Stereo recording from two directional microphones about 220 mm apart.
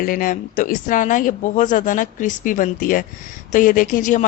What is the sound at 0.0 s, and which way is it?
Speech, 40° left (ahead or behind).